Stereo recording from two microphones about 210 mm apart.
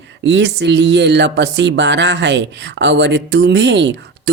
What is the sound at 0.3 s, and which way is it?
Music, 55° right (ahead or behind).